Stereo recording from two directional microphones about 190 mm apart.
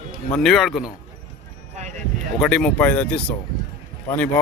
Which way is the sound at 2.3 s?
5° left (ahead or behind).